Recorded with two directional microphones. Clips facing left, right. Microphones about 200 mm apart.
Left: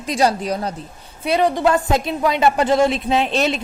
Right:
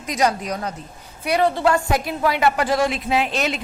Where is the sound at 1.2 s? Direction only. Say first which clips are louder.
Left 2 dB; 20° left (ahead or behind).